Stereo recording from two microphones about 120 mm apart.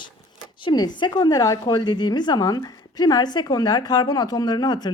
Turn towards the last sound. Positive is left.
turn(degrees=35)  # may be behind; listen again after turning